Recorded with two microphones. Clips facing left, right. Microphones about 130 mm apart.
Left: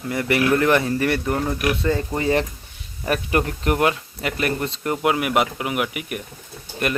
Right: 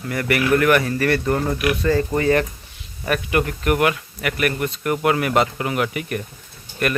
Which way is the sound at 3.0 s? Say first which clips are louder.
Right 1 dB; 30° left (ahead or behind).